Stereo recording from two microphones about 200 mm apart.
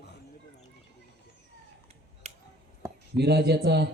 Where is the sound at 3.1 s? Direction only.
55° right (ahead or behind).